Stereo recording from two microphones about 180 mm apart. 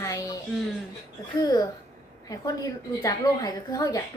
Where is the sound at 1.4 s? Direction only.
20° left (ahead or behind).